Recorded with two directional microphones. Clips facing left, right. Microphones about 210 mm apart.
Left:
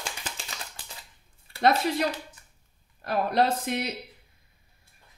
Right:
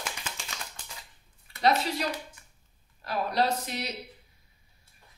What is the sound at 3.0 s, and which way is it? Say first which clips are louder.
Speech: left 3 dB; 55° left (ahead or behind).